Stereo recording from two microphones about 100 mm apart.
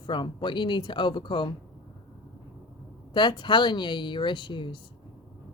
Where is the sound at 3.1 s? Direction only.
50° left (ahead or behind).